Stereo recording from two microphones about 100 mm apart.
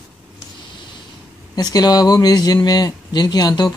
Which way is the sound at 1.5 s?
40° left (ahead or behind).